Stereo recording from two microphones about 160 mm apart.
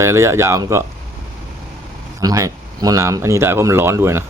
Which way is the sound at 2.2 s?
20° right (ahead or behind).